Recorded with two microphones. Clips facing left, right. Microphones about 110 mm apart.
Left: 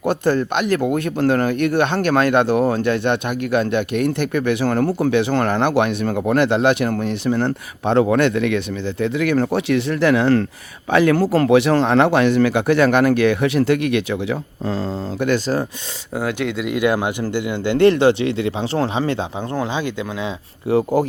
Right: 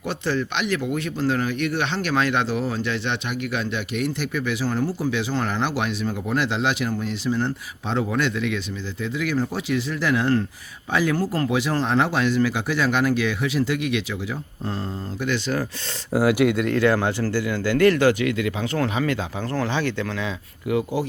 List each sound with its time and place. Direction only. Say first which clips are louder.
0.0 s speech: left 7 dB; 50° left (ahead or behind)
16.1 s speech: right 4 dB; 5° right (ahead or behind)
16.6 s speech: left 1 dB; 15° left (ahead or behind)
20.7 s speech: left 6 dB; 30° left (ahead or behind)